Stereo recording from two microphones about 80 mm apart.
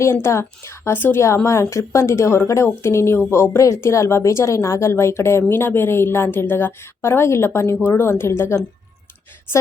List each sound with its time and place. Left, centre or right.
0.0 s a woman's voice: left